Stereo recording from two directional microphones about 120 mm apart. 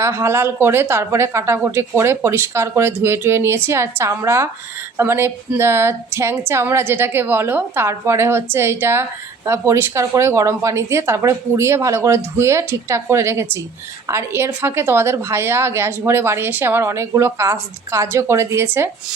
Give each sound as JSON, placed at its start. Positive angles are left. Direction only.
{"t": 0.0, "sound": "a woman's voice", "side_deg": -20}